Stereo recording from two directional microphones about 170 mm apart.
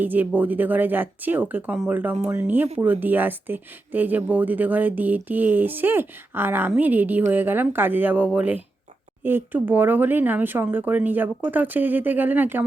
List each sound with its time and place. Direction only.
0.0 s speech: 10° right (ahead or behind)